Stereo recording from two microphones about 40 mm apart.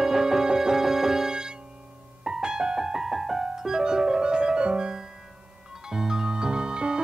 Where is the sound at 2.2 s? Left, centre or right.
Centre.